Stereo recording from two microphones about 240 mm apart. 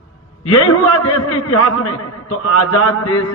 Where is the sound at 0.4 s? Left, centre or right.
Left.